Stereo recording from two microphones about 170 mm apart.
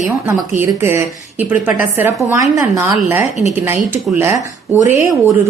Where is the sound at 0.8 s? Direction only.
15° right (ahead or behind).